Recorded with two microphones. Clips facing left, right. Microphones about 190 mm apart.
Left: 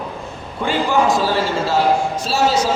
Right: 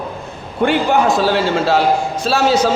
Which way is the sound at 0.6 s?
65° right (ahead or behind).